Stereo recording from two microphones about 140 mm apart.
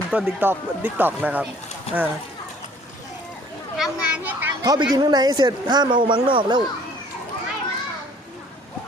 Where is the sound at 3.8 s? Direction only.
10° right (ahead or behind).